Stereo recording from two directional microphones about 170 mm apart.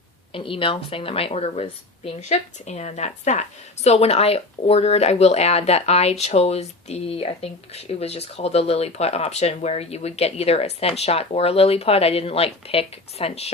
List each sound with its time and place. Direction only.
0.3 s speech: 30° left (ahead or behind)